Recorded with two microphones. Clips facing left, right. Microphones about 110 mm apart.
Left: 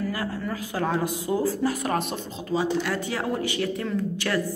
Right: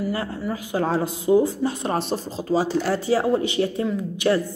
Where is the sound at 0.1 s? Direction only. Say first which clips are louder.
Right 3 dB; 25° right (ahead or behind).